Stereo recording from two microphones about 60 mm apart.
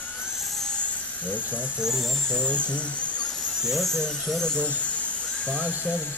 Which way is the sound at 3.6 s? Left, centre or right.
Centre.